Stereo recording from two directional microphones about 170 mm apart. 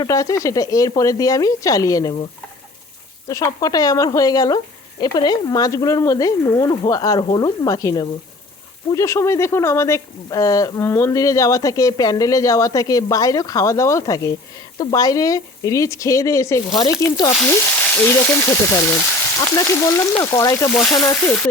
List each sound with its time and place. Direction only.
0.0 s speech: 20° left (ahead or behind)
3.2 s speech: 20° left (ahead or behind)
17.4 s speech: 10° left (ahead or behind)